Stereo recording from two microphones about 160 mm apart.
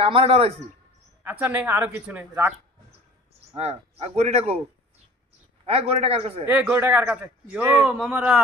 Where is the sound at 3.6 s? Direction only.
40° right (ahead or behind).